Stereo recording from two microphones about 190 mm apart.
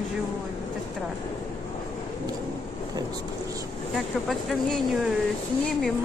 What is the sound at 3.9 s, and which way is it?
Speech, centre (ahead or behind).